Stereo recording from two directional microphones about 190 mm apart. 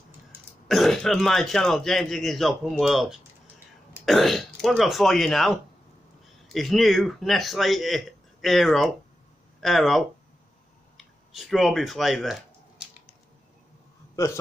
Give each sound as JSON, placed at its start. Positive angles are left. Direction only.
{"t": 0.7, "sound": "a man's voice", "side_deg": 0}
{"t": 11.3, "sound": "speech", "side_deg": 0}
{"t": 14.1, "sound": "a man's voice", "side_deg": 15}